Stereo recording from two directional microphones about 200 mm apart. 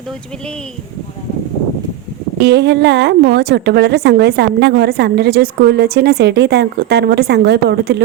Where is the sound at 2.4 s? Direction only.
60° right (ahead or behind).